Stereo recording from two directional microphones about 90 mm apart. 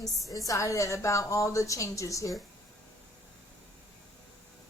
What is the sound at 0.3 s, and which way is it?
A woman's voice, 40° left (ahead or behind).